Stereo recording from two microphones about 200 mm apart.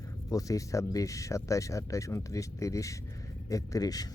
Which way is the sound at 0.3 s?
15° left (ahead or behind).